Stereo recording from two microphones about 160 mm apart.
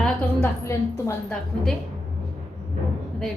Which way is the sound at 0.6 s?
15° left (ahead or behind).